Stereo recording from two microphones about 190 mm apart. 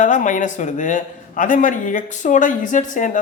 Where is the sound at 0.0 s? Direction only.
40° left (ahead or behind).